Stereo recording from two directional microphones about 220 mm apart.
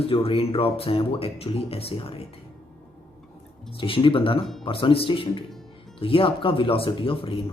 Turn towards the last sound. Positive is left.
turn(degrees=25)  # may be behind; listen again after turning